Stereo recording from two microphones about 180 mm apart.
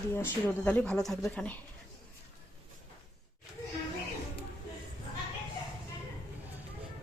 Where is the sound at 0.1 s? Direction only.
10° left (ahead or behind).